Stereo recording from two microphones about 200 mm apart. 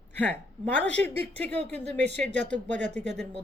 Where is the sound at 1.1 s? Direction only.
30° right (ahead or behind).